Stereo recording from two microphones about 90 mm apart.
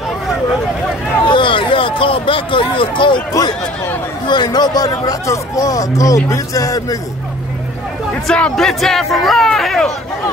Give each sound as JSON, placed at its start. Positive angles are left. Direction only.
{"t": 1.2, "sound": "speech", "side_deg": 65}
{"t": 4.3, "sound": "speech", "side_deg": 50}
{"t": 8.1, "sound": "speech", "side_deg": 10}